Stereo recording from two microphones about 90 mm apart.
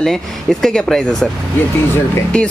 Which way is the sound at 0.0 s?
5° left (ahead or behind).